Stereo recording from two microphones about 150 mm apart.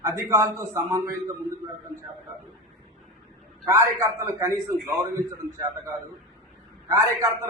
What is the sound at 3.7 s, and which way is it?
A man's voice, 20° right (ahead or behind).